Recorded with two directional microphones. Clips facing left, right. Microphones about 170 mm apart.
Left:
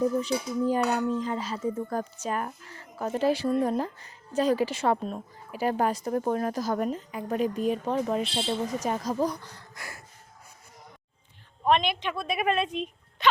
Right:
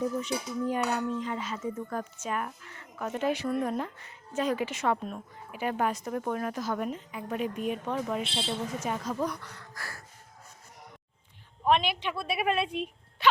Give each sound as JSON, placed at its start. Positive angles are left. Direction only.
{"t": 0.0, "sound": "speech", "side_deg": 35}
{"t": 9.7, "sound": "a sound", "side_deg": 20}
{"t": 11.6, "sound": "speech", "side_deg": -5}